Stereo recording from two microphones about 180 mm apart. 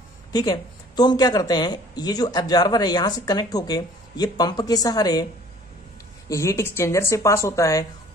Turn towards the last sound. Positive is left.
turn(degrees=20)  # may be behind; listen again after turning